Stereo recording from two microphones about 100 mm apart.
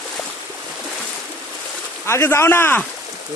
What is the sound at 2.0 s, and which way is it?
Speech, 25° left (ahead or behind).